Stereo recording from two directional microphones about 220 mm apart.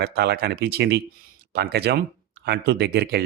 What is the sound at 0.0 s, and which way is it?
Speech, 45° right (ahead or behind).